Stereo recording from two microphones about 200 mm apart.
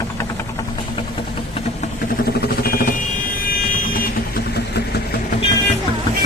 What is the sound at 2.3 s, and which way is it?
Vehicle, 50° left (ahead or behind).